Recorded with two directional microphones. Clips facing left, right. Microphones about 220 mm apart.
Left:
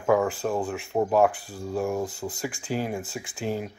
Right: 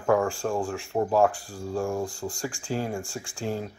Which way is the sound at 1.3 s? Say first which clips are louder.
Even; 20° left (ahead or behind).